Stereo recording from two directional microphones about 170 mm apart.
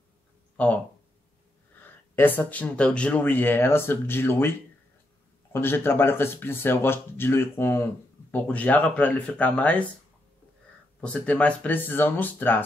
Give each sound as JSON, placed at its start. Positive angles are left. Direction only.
{"t": 0.6, "sound": "speech", "side_deg": 5}
{"t": 1.8, "sound": "speech", "side_deg": 10}
{"t": 11.0, "sound": "speech", "side_deg": 5}